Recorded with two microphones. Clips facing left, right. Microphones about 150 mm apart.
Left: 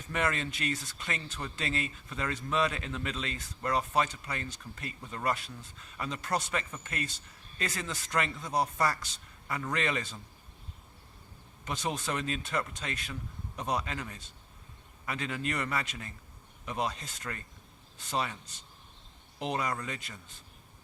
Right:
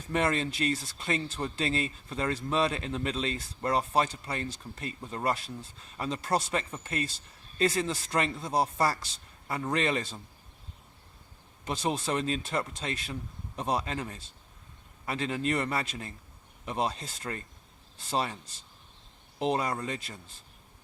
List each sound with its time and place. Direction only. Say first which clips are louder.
0.1 s speech: right 4 dB; 30° right (ahead or behind)
11.6 s speech: right 4 dB; 30° right (ahead or behind)